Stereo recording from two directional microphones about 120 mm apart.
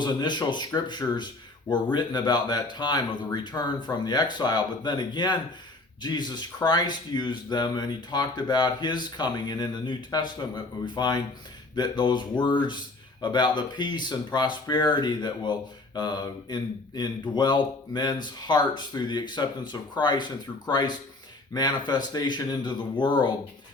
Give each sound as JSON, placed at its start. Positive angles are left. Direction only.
{"t": 0.0, "sound": "speech", "side_deg": 40}